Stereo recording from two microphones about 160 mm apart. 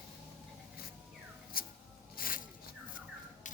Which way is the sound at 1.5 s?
65° left (ahead or behind).